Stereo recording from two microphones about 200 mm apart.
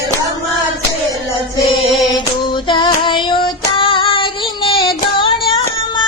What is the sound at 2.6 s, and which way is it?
Child singing, 25° left (ahead or behind).